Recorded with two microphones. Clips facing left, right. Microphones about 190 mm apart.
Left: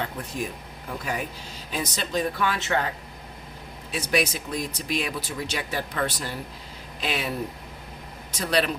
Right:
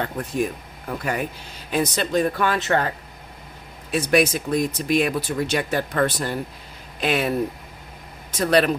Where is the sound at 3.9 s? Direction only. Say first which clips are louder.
Right 6 dB; 55° right (ahead or behind).